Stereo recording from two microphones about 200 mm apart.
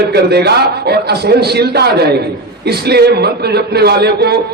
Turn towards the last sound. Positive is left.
turn(degrees=-55)  # may be behind; listen again after turning